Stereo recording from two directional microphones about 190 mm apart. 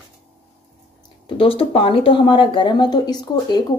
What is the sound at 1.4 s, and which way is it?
Speech, 30° left (ahead or behind).